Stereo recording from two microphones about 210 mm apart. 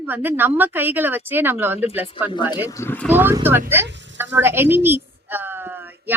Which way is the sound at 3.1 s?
10° right (ahead or behind).